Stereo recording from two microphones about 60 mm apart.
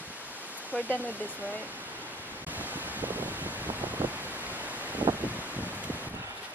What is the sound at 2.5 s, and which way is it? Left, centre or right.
Wind, right.